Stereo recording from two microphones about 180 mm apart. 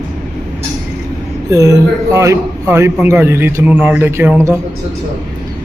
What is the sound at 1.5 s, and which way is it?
Speech, 20° right (ahead or behind).